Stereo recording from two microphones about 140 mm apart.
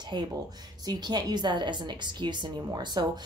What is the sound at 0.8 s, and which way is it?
A woman's voice, 30° right (ahead or behind).